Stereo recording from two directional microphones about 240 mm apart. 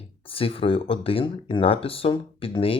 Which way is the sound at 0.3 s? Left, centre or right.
Left.